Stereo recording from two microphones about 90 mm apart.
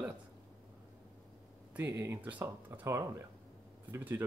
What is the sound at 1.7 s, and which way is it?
Speech, 25° right (ahead or behind).